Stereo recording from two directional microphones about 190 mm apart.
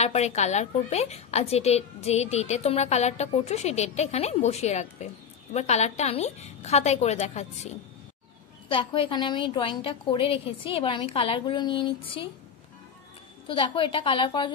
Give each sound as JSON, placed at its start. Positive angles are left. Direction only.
{"t": 0.0, "sound": "a woman's voice", "side_deg": 35}
{"t": 13.5, "sound": "a woman's voice", "side_deg": 25}